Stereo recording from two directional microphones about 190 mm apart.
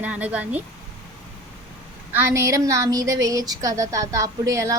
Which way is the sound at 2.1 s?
15° right (ahead or behind).